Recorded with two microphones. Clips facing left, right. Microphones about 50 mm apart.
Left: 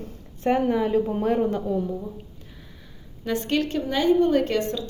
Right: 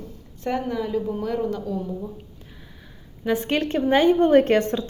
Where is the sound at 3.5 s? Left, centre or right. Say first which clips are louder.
Right 4 dB; right.